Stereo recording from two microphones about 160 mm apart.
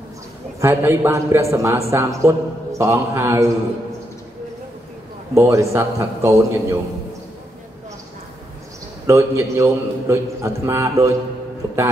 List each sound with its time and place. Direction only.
0.6 s a man's voice: 15° right (ahead or behind)
5.3 s a man's voice: 20° right (ahead or behind)
9.0 s a man's voice: 15° right (ahead or behind)